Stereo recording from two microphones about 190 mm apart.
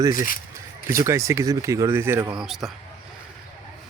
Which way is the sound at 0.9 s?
15° right (ahead or behind).